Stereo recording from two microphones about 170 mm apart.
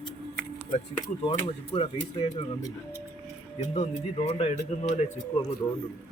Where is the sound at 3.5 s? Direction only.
40° left (ahead or behind).